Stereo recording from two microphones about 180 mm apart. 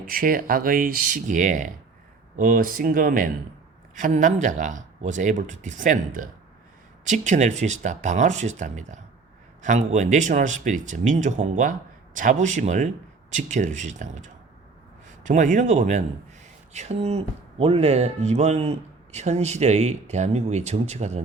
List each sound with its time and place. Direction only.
0.0 s speech: 50° right (ahead or behind)
15.3 s speech: 45° right (ahead or behind)